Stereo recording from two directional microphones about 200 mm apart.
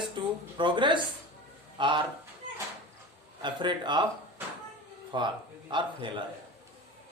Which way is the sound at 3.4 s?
20° right (ahead or behind).